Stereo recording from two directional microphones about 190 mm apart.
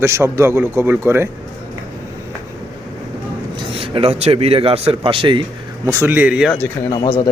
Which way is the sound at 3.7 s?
30° right (ahead or behind).